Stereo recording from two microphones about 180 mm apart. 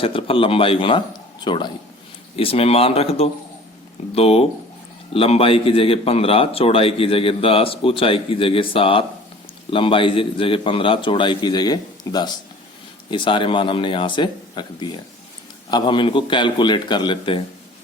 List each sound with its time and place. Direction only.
0.0 s a man's voice: 30° left (ahead or behind)